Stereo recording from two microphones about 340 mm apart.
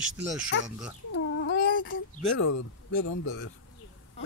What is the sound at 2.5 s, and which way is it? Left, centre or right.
A man's voice, left.